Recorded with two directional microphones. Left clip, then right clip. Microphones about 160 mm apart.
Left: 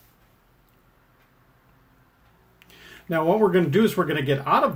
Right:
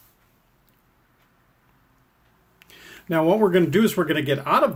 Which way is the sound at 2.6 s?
40° right (ahead or behind).